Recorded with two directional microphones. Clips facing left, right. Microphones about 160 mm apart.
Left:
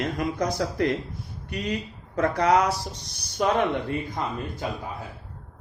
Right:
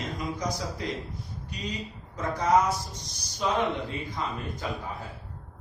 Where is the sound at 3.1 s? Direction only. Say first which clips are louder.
Left 5 dB; 55° left (ahead or behind).